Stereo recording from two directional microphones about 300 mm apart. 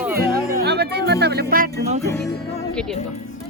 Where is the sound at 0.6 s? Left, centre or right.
Right.